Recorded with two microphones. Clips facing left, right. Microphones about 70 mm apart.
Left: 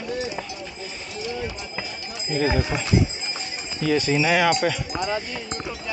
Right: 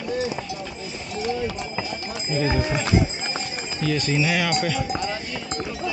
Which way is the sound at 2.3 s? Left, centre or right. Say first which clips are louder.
Left 1 dB; centre.